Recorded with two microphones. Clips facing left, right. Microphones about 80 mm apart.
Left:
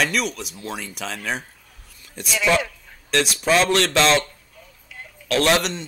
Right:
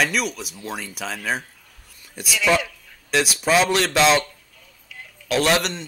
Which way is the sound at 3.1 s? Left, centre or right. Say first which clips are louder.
Even; centre.